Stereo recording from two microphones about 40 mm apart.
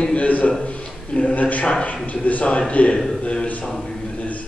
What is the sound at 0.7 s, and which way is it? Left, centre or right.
A man's voice, left.